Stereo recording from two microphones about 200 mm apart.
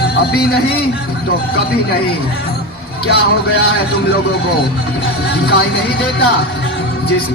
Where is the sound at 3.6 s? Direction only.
55° left (ahead or behind).